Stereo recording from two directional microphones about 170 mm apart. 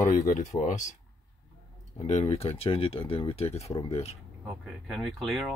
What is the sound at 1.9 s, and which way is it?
Speech, 40° left (ahead or behind).